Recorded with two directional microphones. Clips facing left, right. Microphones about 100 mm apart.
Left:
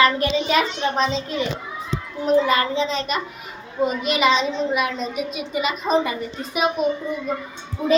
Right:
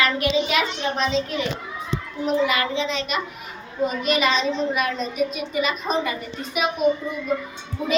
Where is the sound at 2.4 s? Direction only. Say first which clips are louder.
Left 2 dB; 35° left (ahead or behind).